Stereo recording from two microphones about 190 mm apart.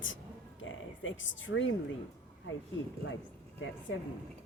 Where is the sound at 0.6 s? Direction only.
90° left.